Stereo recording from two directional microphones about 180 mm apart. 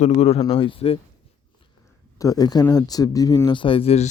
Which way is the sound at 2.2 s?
20° left (ahead or behind).